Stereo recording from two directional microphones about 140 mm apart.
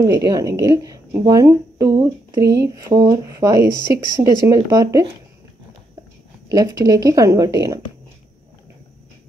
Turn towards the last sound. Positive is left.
turn(degrees=-25)  # may be behind; listen again after turning